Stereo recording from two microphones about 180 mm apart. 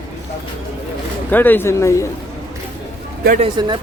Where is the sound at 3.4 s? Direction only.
25° right (ahead or behind).